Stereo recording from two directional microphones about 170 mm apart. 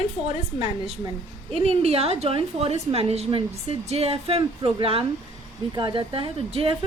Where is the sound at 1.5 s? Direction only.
35° right (ahead or behind).